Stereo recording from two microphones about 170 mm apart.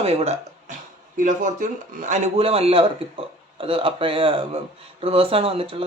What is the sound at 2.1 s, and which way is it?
A man's voice, 35° right (ahead or behind).